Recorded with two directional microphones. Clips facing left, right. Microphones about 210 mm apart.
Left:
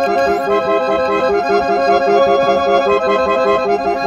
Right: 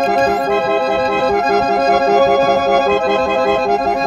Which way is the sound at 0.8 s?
50° left (ahead or behind).